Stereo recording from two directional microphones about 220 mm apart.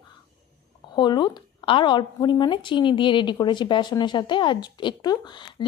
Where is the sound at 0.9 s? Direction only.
20° left (ahead or behind).